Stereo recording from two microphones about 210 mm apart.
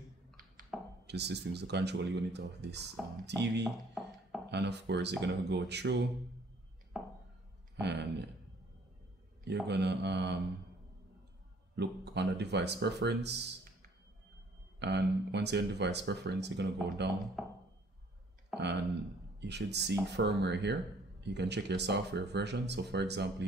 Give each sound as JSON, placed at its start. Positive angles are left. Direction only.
{"t": 0.7, "sound": "chopping", "side_deg": 0}
{"t": 1.0, "sound": "speech", "side_deg": -50}
{"t": 3.6, "sound": "a sound", "side_deg": 0}
{"t": 4.5, "sound": "speech", "side_deg": -55}
{"t": 6.9, "sound": "chopping", "side_deg": 0}
{"t": 7.8, "sound": "speech", "side_deg": -55}
{"t": 9.7, "sound": "speech", "side_deg": -55}
{"t": 11.7, "sound": "speech", "side_deg": -55}
{"t": 14.8, "sound": "speech", "side_deg": -55}
{"t": 17.4, "sound": "a sound", "side_deg": 0}
{"t": 18.6, "sound": "speech", "side_deg": -55}